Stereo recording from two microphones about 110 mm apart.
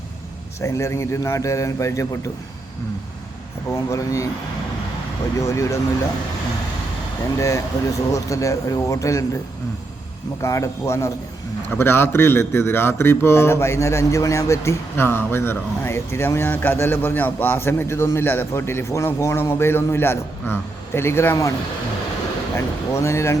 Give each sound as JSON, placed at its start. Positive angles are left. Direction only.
{"t": 0.6, "sound": "a man's voice", "side_deg": 25}
{"t": 3.7, "sound": "a man's voice", "side_deg": 25}
{"t": 5.4, "sound": "a man's voice", "side_deg": 30}
{"t": 7.3, "sound": "a man's voice", "side_deg": 30}
{"t": 10.4, "sound": "a man's voice", "side_deg": 25}
{"t": 22.5, "sound": "a man's voice", "side_deg": 25}